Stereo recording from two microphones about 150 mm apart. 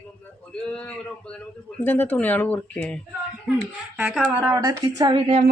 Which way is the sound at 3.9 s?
10° right (ahead or behind).